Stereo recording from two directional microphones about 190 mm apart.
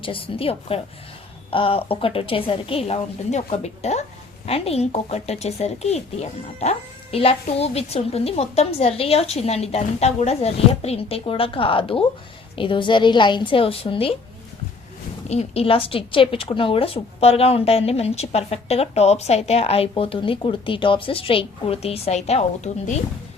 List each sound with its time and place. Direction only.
0.0 s a woman's voice: 30° left (ahead or behind)
15.3 s a woman's voice: 35° left (ahead or behind)